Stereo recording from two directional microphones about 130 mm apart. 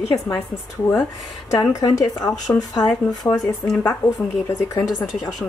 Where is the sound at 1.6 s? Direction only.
25° left (ahead or behind).